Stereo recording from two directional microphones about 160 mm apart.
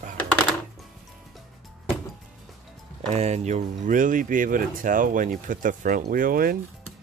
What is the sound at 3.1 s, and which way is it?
Speech, 45° right (ahead or behind).